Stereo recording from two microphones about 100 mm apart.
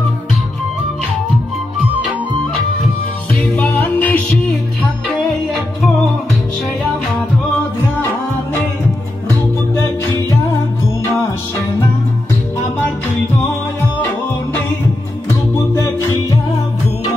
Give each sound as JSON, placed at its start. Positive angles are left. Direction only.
{"t": 3.5, "sound": "music", "side_deg": 20}
{"t": 15.8, "sound": "music", "side_deg": 35}